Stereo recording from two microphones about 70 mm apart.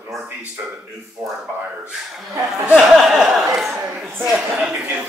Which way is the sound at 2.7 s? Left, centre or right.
Centre.